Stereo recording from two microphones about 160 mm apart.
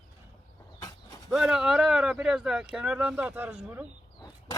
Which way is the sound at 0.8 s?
20° left (ahead or behind).